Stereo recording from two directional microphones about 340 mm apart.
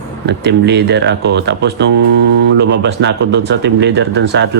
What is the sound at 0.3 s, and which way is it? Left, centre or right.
Speech, right.